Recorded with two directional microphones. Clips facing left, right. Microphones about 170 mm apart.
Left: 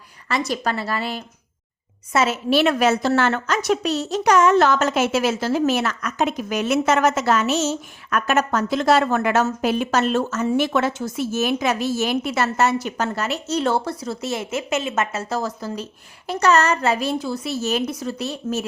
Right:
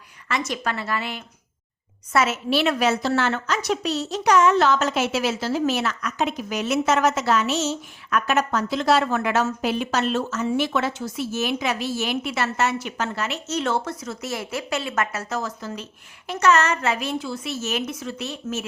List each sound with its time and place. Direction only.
0.3 s a woman's voice: 35° left (ahead or behind)
2.5 s a woman's voice: 50° left (ahead or behind)